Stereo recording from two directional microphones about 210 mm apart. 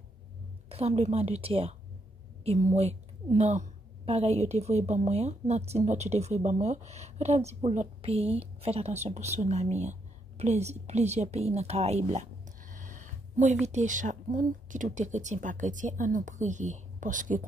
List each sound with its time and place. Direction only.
0.7 s a woman's voice: 30° right (ahead or behind)